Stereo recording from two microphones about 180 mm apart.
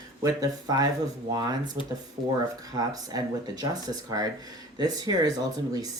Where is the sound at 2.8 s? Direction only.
20° right (ahead or behind).